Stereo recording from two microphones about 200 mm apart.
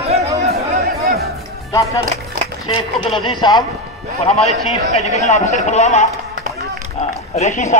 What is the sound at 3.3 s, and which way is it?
Speech, 20° left (ahead or behind).